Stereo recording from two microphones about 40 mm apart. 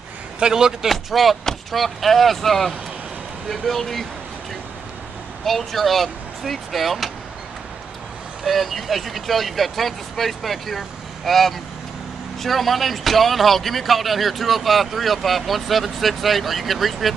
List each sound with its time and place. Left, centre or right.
0.4 s a man's voice: centre
0.8 s speech: centre
5.4 s speech: centre
8.5 s speech: centre